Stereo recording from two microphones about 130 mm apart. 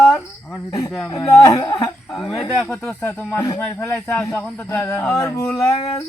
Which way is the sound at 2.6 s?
20° left (ahead or behind).